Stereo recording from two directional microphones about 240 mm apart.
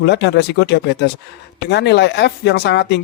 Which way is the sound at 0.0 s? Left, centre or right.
Left.